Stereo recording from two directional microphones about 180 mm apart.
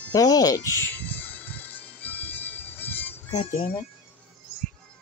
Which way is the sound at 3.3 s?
35° left (ahead or behind).